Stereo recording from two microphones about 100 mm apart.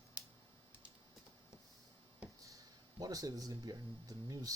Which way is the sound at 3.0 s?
35° right (ahead or behind).